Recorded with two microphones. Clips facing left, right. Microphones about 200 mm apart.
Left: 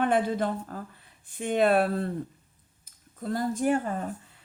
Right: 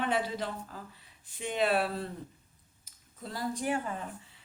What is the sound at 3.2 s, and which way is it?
Speech, 50° left (ahead or behind).